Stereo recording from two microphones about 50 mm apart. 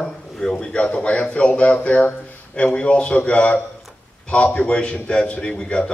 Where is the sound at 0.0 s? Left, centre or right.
Centre.